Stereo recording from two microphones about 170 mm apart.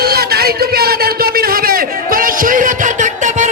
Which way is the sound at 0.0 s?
65° right (ahead or behind).